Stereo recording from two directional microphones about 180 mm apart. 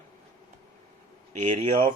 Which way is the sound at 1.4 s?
40° right (ahead or behind).